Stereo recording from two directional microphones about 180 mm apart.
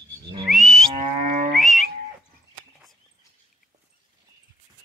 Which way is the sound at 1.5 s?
Centre (ahead or behind).